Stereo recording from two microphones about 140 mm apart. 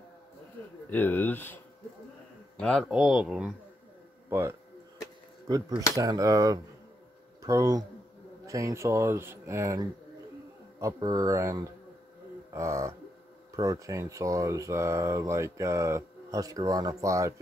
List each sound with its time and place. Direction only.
0.8 s speech: 15° left (ahead or behind)
2.6 s speech: centre (ahead or behind)
4.3 s speech: 15° right (ahead or behind)